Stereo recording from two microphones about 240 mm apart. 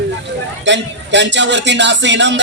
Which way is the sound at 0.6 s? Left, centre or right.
Right.